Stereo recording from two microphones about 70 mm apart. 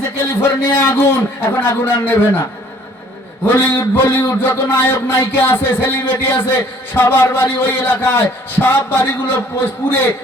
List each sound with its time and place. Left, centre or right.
0.3 s a man's voice: left
3.4 s a man's voice: left